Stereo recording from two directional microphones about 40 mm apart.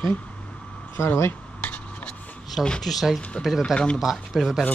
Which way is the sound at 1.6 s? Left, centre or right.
Left.